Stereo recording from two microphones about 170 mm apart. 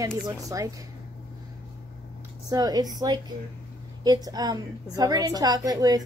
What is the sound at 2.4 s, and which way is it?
A woman's voice, 20° right (ahead or behind).